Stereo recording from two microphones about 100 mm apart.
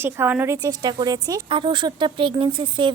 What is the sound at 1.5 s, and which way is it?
Speech, 55° right (ahead or behind).